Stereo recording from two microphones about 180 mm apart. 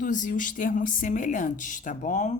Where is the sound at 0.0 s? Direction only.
45° left (ahead or behind).